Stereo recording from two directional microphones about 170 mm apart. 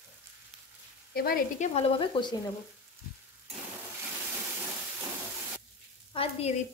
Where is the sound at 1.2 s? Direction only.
60° left (ahead or behind).